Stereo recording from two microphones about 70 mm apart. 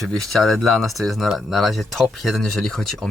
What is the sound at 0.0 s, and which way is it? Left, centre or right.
Speech, centre.